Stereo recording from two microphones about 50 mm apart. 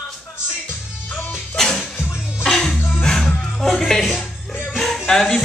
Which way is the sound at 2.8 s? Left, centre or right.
Left.